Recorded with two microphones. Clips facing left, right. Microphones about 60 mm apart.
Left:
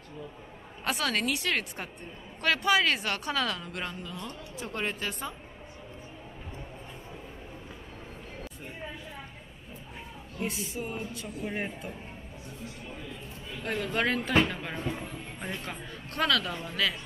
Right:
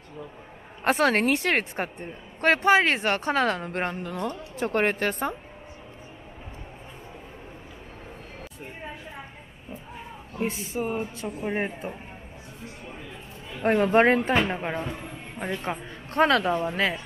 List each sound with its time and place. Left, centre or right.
0.8 s a woman's voice: right
10.3 s a woman's voice: right
13.6 s a woman's voice: right